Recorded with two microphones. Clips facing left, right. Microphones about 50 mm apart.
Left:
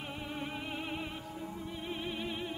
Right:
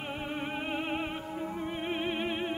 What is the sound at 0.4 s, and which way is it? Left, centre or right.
Music, right.